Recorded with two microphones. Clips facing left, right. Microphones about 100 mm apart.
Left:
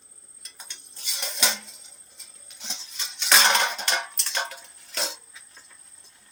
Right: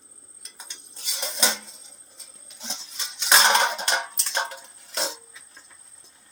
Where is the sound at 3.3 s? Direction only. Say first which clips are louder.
Right 2 dB; 20° right (ahead or behind).